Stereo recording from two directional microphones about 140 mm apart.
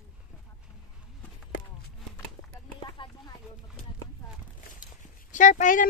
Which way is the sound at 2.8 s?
35° left (ahead or behind).